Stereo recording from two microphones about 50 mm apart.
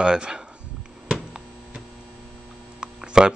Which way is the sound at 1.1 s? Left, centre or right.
Centre.